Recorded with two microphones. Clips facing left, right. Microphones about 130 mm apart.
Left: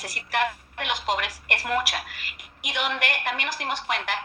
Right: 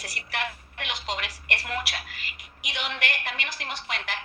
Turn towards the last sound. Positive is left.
turn(degrees=45)  # may be behind; listen again after turning